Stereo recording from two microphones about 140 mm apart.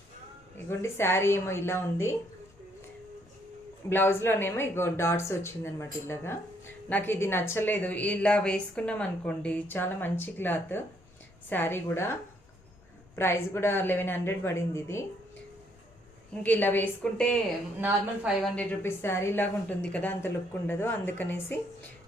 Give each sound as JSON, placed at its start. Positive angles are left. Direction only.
{"t": 0.7, "sound": "a woman's voice", "side_deg": 20}
{"t": 3.8, "sound": "a woman's voice", "side_deg": 15}
{"t": 13.1, "sound": "a woman's voice", "side_deg": 20}
{"t": 16.4, "sound": "a woman's voice", "side_deg": 10}
{"t": 17.7, "sound": "a woman's voice", "side_deg": -15}
{"t": 18.4, "sound": "a woman's voice", "side_deg": 10}